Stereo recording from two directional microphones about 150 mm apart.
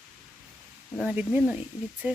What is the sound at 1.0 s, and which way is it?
Speech, 10° right (ahead or behind).